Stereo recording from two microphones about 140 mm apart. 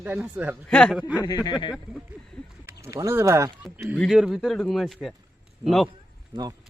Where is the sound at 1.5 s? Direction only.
35° left (ahead or behind).